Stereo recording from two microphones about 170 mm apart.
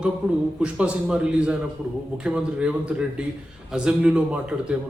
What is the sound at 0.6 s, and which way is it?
A man's voice, 5° right (ahead or behind).